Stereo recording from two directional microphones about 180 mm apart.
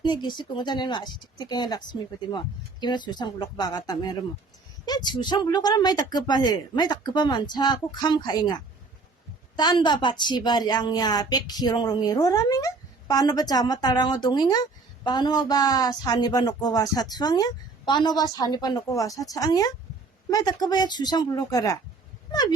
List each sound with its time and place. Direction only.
0.0 s a woman's voice: 25° left (ahead or behind)